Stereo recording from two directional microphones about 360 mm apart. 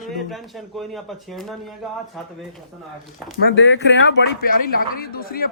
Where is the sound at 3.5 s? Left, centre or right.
Left.